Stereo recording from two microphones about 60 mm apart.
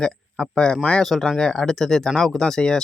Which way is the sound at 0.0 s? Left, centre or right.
Centre.